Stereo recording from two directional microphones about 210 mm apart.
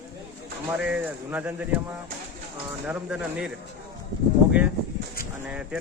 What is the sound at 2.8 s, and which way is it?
Speech, 5° right (ahead or behind).